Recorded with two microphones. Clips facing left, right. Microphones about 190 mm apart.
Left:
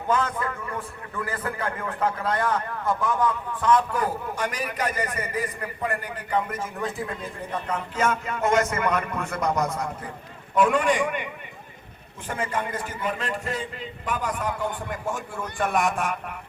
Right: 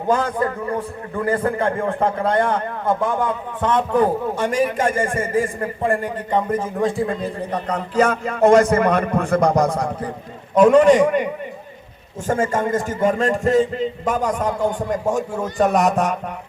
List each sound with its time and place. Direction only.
0.1 s a man's voice: 35° right (ahead or behind)
4.0 s a man's voice: 40° right (ahead or behind)
12.3 s a man's voice: 45° right (ahead or behind)